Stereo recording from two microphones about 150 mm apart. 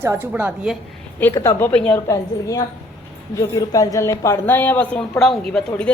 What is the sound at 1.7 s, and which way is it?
Speech, 10° left (ahead or behind).